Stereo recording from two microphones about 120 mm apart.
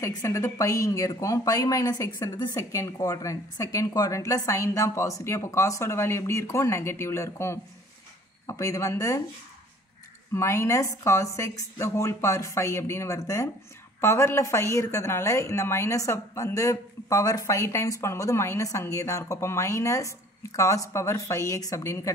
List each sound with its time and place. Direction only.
0.0 s a woman's voice: 25° left (ahead or behind)
10.3 s a woman's voice: 25° left (ahead or behind)